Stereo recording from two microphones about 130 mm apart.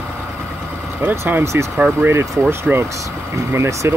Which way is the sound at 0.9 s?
20° right (ahead or behind).